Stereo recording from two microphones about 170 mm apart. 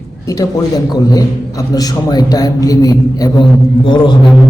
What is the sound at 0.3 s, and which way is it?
A man's voice, 20° left (ahead or behind).